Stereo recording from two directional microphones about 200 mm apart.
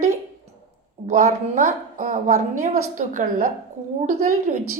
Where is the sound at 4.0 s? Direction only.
35° right (ahead or behind).